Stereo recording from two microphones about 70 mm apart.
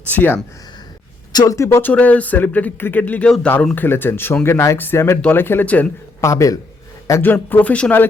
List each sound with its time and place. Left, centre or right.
0.1 s speech: left
1.3 s speech: left
1.5 s a man's voice: left
1.8 s speech: left
3.2 s speech: centre
3.8 s speech: left
6.2 s a man's voice: left
7.5 s speech: centre